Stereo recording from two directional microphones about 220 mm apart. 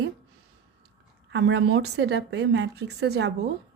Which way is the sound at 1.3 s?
55° right (ahead or behind).